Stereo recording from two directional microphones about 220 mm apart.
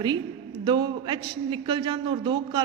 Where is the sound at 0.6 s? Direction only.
20° right (ahead or behind).